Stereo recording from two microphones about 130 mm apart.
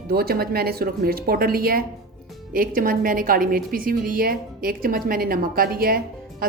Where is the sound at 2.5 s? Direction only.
90° right.